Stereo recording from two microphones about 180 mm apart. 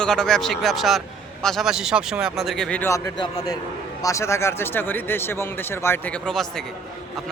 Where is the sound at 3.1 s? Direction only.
25° left (ahead or behind); by 6.6 s 5° left (ahead or behind).